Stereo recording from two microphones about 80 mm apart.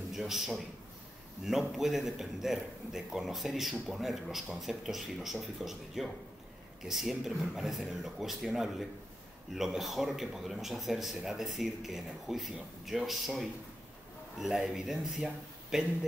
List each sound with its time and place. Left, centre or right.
0.1 s a man's voice: centre